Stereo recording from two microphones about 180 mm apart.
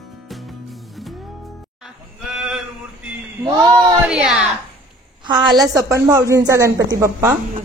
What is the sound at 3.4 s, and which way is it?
Speech, 25° right (ahead or behind).